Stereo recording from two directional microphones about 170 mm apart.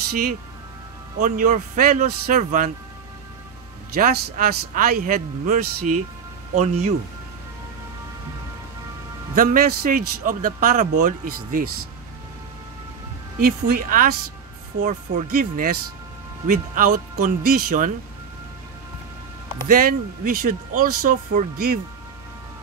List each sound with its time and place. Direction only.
1.2 s a man's voice: 50° right (ahead or behind)
3.9 s speech: 60° right (ahead or behind)
6.5 s a man's voice: 40° right (ahead or behind)
9.3 s a man's voice: 50° right (ahead or behind)
13.4 s a man's voice: 55° right (ahead or behind)
19.7 s a man's voice: 55° right (ahead or behind)